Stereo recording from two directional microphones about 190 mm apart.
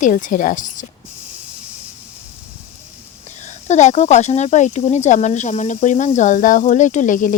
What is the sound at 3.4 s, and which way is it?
Speech, 35° left (ahead or behind).